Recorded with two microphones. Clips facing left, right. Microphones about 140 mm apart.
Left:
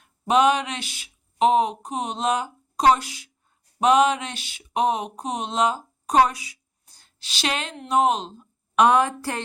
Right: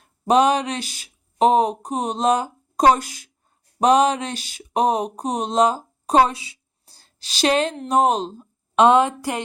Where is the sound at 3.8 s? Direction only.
35° right (ahead or behind).